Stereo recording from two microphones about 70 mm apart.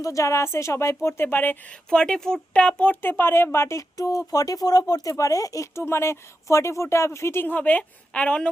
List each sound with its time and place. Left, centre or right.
0.0 s speech: left
1.9 s speech: centre; by 5.8 s left
5.8 s speech: left; by 8.4 s centre